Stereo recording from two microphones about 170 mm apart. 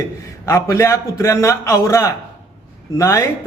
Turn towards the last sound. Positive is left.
turn(degrees=15)  # may be behind; listen again after turning